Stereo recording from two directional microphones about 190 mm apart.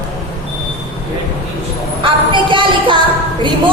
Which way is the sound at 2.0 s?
25° right (ahead or behind).